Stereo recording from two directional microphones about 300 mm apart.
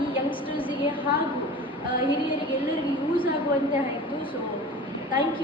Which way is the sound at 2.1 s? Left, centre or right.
Centre.